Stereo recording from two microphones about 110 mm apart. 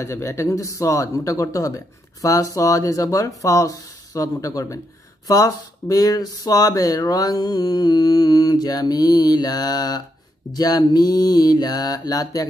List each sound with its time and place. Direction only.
0.0 s speech: 25° left (ahead or behind)